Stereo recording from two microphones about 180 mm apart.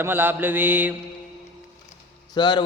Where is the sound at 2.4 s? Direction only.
25° left (ahead or behind).